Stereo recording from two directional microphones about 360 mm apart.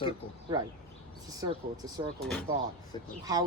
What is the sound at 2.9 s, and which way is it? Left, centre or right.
Speech, centre.